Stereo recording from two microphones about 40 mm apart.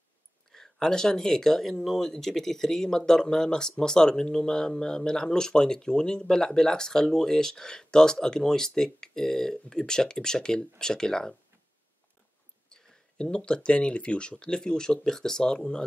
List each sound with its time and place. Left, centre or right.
0.5 s speech: centre
12.6 s speech: centre